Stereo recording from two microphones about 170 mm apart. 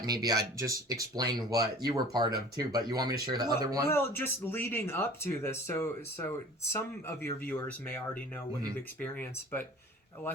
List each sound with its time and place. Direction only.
0.0 s speech: 20° right (ahead or behind)
3.8 s speech: 15° left (ahead or behind)